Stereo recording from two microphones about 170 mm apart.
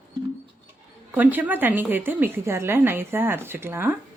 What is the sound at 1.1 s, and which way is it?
A woman's voice, 10° right (ahead or behind).